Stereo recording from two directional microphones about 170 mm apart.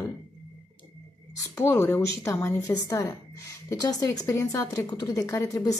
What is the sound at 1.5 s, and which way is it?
Speech, 15° left (ahead or behind).